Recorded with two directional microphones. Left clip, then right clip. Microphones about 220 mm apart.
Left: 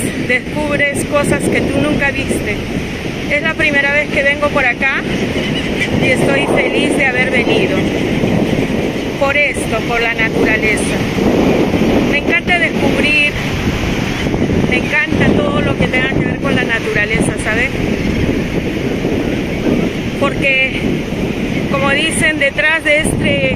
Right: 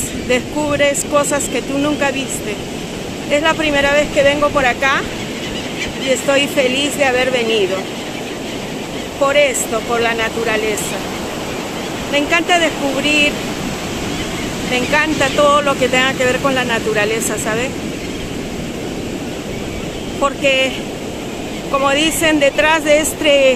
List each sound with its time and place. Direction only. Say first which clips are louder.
0.3 s speech: even; 15° right (ahead or behind)
3.3 s speech: even; 15° right (ahead or behind)
6.7 s speech: left 2 dB; 15° right (ahead or behind)
16.5 s speech: left 1 dB; 15° right (ahead or behind)
21.8 s speech: left 1 dB; 15° right (ahead or behind)